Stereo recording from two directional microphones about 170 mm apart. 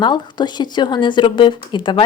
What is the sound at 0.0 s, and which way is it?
A woman's voice, 25° left (ahead or behind).